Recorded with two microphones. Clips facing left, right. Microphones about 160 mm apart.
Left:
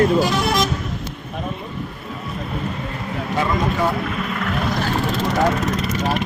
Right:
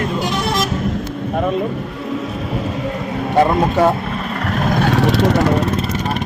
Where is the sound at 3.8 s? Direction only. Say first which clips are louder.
Right 9 dB; 80° right.